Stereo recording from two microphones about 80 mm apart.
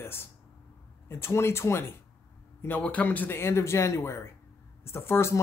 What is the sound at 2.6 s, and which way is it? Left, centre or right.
Speech, left.